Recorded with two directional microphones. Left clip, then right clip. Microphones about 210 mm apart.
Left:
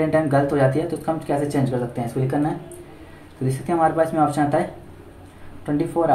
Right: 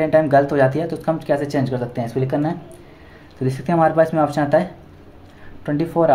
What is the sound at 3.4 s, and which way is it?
Speech, 50° right (ahead or behind).